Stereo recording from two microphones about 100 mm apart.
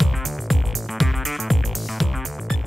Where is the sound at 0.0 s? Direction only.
Centre (ahead or behind).